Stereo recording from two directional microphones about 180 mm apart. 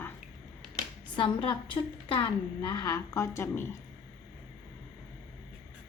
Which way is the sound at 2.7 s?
20° left (ahead or behind).